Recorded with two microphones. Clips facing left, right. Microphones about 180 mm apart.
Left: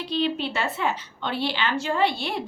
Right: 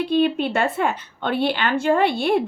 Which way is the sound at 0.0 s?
55° right (ahead or behind).